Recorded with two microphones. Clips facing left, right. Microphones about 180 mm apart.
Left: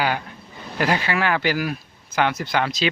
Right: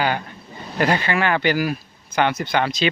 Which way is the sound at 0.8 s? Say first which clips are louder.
Right 2 dB; 5° left (ahead or behind).